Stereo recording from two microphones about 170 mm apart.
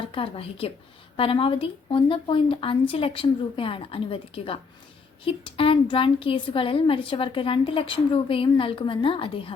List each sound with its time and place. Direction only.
0.1 s a woman's voice: 35° left (ahead or behind)